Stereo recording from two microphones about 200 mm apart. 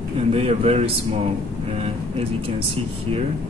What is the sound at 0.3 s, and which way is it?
Speech, 30° right (ahead or behind).